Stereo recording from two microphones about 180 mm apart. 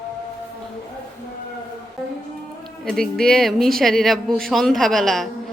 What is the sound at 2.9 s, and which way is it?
A woman's voice, centre (ahead or behind).